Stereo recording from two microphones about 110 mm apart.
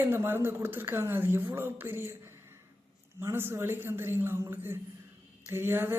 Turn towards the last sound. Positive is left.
turn(degrees=-20)  # may be behind; listen again after turning